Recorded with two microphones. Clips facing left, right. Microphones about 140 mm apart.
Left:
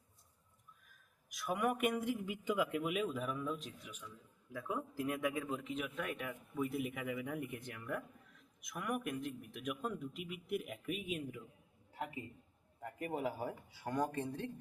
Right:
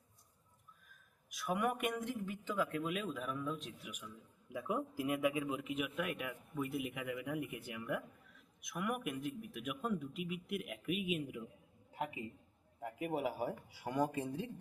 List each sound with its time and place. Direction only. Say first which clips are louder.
1.3 s speech: even; centre (ahead or behind)
4.5 s a man's voice: right 2 dB; 15° right (ahead or behind)
11.9 s a sound: right 2 dB; 15° right (ahead or behind)
12.8 s a man's voice: right 2 dB; 10° right (ahead or behind)